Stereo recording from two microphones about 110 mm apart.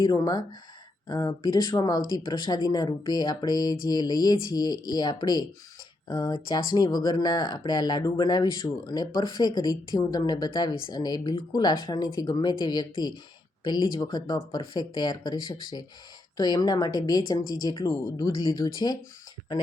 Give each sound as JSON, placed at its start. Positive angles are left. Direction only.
{"t": 0.0, "sound": "speech", "side_deg": 40}
{"t": 18.3, "sound": "speech", "side_deg": 45}